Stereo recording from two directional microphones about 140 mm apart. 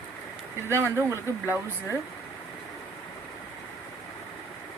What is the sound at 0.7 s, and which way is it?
Speech, 20° right (ahead or behind).